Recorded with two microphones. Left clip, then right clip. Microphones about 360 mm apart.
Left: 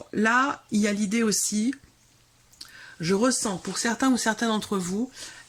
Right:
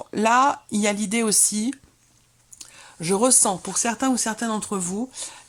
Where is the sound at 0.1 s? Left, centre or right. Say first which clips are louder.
Right 4 dB; centre.